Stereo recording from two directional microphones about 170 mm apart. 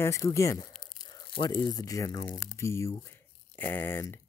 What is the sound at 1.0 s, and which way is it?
Tearing, 25° left (ahead or behind).